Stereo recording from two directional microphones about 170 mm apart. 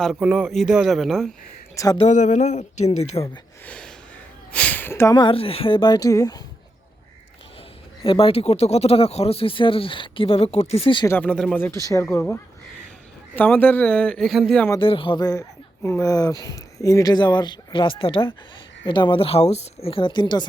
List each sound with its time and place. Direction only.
0.0 s speech: 5° right (ahead or behind)
1.7 s speech: 20° left (ahead or behind)
2.0 s speech: 45° left (ahead or behind)
3.7 s gasp: 5° left (ahead or behind)
4.5 s speech: 10° left (ahead or behind)
5.1 s speech: 30° left (ahead or behind)
8.0 s speech: 30° left (ahead or behind)
11.0 s a man's voice: 10° left (ahead or behind)
14.8 s speech: 30° left (ahead or behind)